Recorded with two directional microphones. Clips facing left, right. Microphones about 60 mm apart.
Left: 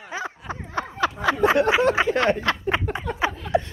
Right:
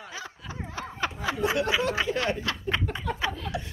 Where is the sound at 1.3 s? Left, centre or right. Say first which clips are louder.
Left 7 dB; left.